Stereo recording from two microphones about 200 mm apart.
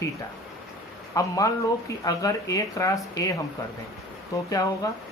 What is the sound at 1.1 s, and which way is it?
Speech, 15° left (ahead or behind).